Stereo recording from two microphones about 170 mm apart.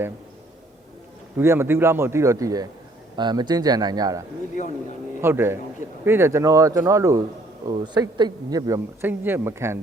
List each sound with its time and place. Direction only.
1.4 s speech: 15° right (ahead or behind)
4.6 s speech: 45° left (ahead or behind)
5.2 s speech: 15° right (ahead or behind)